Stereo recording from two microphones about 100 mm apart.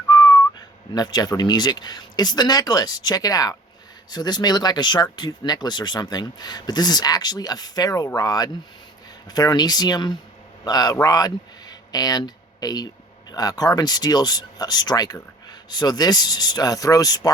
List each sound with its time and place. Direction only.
0.1 s whistling: 40° left (ahead or behind)
0.9 s a man's voice: 40° left (ahead or behind)
11.7 s a sound: 40° left (ahead or behind)
13.3 s speech: 40° left (ahead or behind)